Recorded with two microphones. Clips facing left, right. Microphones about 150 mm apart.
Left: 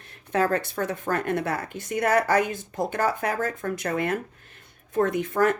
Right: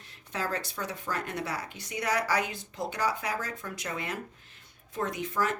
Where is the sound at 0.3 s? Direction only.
55° left (ahead or behind).